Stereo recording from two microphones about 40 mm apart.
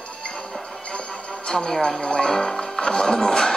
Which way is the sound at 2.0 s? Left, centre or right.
Centre.